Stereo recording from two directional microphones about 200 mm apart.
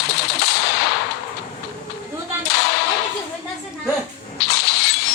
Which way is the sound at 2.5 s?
55° left (ahead or behind).